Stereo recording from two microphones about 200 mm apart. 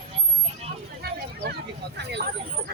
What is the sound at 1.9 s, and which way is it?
Speech, 55° right (ahead or behind).